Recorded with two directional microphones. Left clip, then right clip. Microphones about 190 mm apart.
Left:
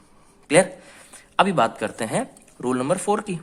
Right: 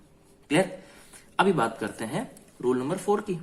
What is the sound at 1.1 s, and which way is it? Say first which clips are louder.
Speech: left 4 dB; 40° left (ahead or behind).